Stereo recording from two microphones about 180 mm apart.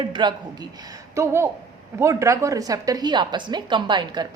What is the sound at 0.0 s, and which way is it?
A woman's voice, 25° right (ahead or behind).